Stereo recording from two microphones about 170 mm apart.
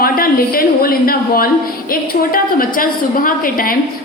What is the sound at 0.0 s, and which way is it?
A woman's voice, 60° left (ahead or behind).